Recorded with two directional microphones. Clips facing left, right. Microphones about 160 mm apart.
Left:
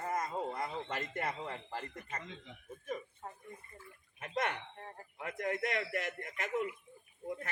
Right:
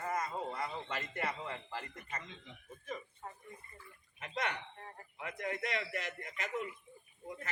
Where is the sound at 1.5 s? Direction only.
45° left (ahead or behind).